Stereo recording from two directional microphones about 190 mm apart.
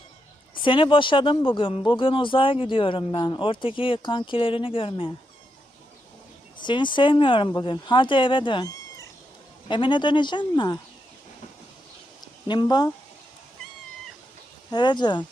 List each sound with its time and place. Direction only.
0.5 s speech: 25° left (ahead or behind)
6.6 s speech: 25° left (ahead or behind)
12.2 s a sound: 20° left (ahead or behind)
14.7 s speech: 25° left (ahead or behind)